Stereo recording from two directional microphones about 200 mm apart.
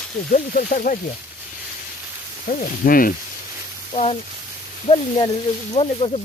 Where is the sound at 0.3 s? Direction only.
45° left (ahead or behind).